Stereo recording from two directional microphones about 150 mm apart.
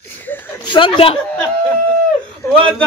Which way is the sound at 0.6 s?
35° left (ahead or behind).